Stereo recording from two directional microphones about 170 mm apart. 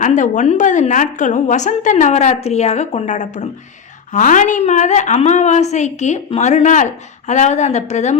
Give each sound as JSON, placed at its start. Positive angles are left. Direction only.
{"t": 0.0, "sound": "a woman's voice", "side_deg": 45}